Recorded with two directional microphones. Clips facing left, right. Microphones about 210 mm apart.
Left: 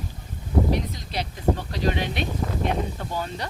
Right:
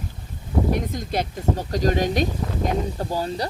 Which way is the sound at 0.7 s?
50° right (ahead or behind).